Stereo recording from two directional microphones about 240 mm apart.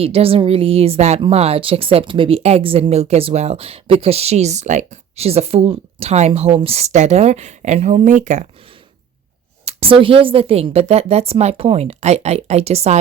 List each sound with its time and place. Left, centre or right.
0.0 s a woman's voice: right
9.6 s a woman's voice: right